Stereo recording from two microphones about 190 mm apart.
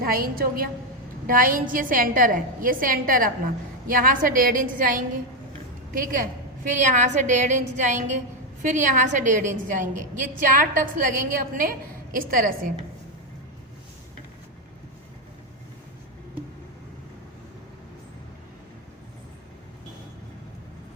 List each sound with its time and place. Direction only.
0.0 s a woman's voice: 50° right (ahead or behind)